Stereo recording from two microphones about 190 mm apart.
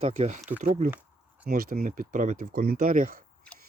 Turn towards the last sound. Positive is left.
turn(degrees=-45)  # may be behind; listen again after turning